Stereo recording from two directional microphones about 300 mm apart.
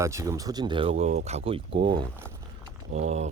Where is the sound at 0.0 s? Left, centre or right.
Centre.